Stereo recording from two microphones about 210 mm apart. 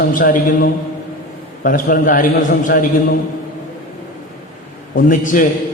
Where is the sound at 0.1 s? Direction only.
40° left (ahead or behind).